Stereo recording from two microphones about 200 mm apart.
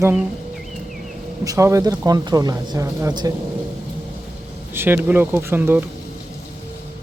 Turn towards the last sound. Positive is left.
turn(degrees=-10)  # may be behind; listen again after turning